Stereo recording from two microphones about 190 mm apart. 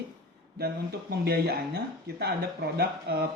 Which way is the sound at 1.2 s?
55° right (ahead or behind).